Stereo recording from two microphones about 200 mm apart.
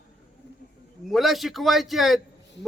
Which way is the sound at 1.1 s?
Centre (ahead or behind).